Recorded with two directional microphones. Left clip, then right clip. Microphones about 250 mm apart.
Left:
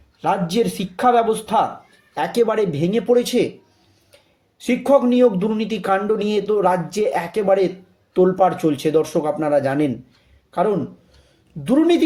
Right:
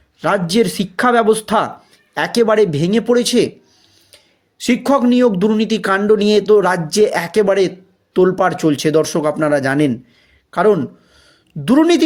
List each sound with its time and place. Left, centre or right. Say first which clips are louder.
0.2 s speech: right 4 dB; right